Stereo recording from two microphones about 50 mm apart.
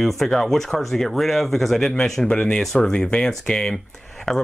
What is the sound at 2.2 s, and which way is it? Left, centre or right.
Speech, left.